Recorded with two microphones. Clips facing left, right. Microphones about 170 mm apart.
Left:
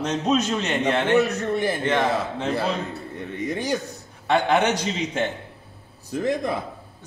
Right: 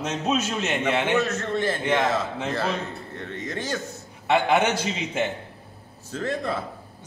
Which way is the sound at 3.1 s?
10° left (ahead or behind).